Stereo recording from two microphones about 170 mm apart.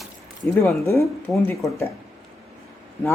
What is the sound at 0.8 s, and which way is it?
Speech, 15° left (ahead or behind).